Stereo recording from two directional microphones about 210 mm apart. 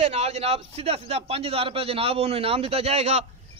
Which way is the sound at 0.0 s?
30° right (ahead or behind).